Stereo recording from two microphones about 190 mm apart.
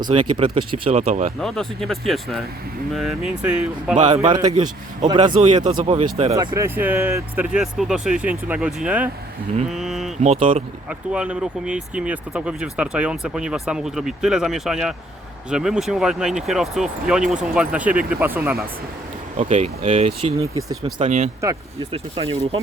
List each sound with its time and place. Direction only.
0.0 s speech: 25° right (ahead or behind)
1.4 s speech: centre (ahead or behind)
4.1 s speech: 25° right (ahead or behind)
6.3 s speech: 15° right (ahead or behind)
10.2 s speech: 40° right (ahead or behind)
10.8 s speech: 5° right (ahead or behind)
19.4 s speech: 40° right (ahead or behind)